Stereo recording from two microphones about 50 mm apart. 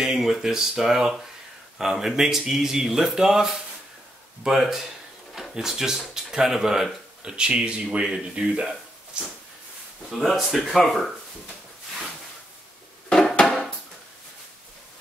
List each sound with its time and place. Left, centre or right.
0.0 s speech: centre
9.1 s a sound: right
10.1 s speech: centre